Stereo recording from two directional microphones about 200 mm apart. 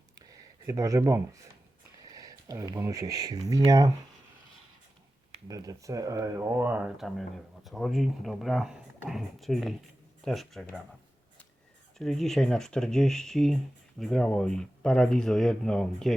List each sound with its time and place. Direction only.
0.2 s a sound: 15° right (ahead or behind)
2.1 s speech: 15° right (ahead or behind)
5.5 s speech: 15° right (ahead or behind); by 10.8 s centre (ahead or behind)
11.9 s speech: centre (ahead or behind)